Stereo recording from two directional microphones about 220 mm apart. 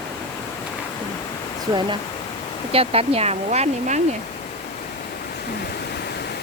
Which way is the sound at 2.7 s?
25° right (ahead or behind).